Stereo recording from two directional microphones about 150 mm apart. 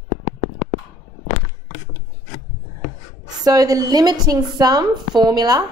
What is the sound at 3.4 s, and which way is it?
A woman's voice, 25° right (ahead or behind).